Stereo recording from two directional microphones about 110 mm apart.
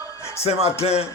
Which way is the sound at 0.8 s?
70° left (ahead or behind).